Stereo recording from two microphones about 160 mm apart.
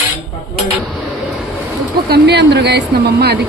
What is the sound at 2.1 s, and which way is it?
Speech, 90° right.